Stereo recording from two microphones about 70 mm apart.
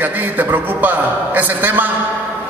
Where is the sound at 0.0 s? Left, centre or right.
Right.